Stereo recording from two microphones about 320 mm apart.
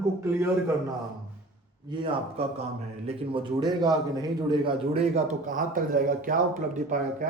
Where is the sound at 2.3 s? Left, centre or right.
Centre.